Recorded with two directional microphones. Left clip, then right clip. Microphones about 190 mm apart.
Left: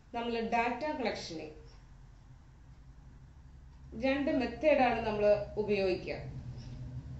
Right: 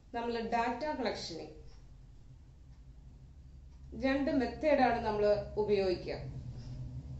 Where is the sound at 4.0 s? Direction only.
Centre (ahead or behind).